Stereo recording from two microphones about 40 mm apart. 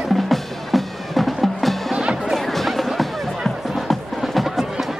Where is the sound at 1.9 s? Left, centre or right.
Centre.